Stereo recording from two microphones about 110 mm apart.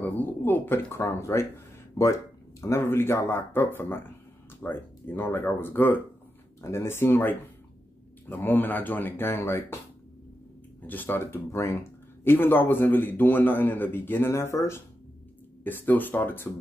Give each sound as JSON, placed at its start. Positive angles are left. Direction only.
{"t": 0.0, "sound": "speech", "side_deg": 15}
{"t": 2.6, "sound": "speech", "side_deg": 25}
{"t": 10.9, "sound": "speech", "side_deg": 15}